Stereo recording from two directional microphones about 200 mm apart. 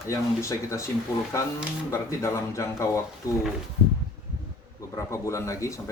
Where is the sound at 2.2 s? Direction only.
15° left (ahead or behind).